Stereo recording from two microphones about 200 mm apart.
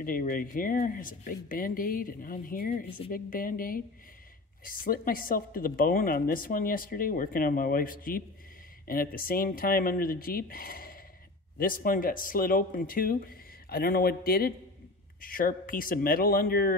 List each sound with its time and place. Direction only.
0.0 s speech: 45° left (ahead or behind)